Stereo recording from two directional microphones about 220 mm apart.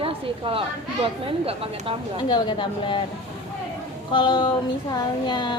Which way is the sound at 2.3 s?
20° left (ahead or behind).